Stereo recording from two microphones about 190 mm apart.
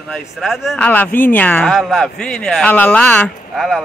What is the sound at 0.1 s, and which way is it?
Speech, centre (ahead or behind).